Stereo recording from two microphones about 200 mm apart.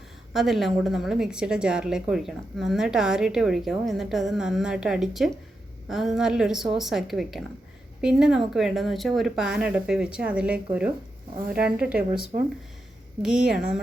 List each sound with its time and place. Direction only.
0.3 s a woman's voice: centre (ahead or behind)